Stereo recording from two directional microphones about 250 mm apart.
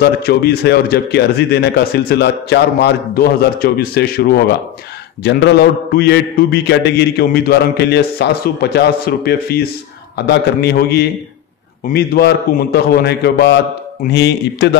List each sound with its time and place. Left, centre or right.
0.0 s speech: left